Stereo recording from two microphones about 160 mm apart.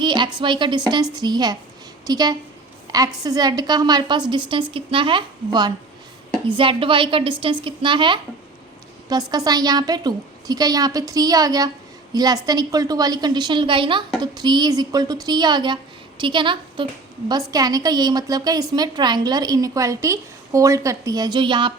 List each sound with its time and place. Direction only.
0.0 s a woman's voice: 30° right (ahead or behind)
2.8 s a sound: 20° right (ahead or behind)
3.2 s a woman's voice: 25° right (ahead or behind)